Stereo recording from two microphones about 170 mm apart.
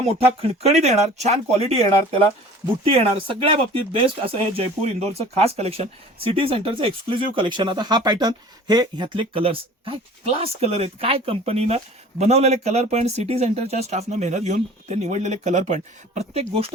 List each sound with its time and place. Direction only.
0.0 s speech: 40° right (ahead or behind)